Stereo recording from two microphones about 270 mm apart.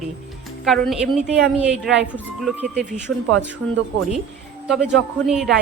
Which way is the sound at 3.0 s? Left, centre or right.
Right.